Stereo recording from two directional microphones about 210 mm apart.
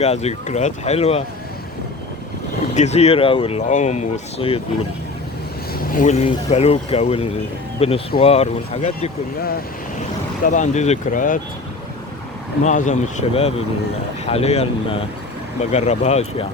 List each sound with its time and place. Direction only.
0.0 s speech: 30° left (ahead or behind)
2.7 s speech: 30° left (ahead or behind)
5.7 s speech: 40° left (ahead or behind)
10.4 s speech: 35° left (ahead or behind)
12.6 s speech: 35° left (ahead or behind)